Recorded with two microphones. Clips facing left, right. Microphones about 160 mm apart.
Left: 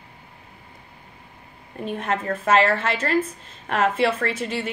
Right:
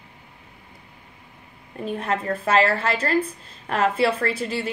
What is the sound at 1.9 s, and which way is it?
A woman's voice, 35° right (ahead or behind).